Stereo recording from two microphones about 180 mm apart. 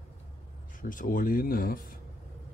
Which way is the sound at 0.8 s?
50° left (ahead or behind).